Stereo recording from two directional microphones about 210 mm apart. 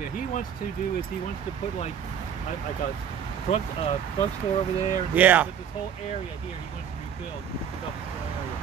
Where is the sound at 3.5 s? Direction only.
30° left (ahead or behind).